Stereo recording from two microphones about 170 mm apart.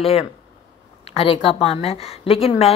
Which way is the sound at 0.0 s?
35° left (ahead or behind).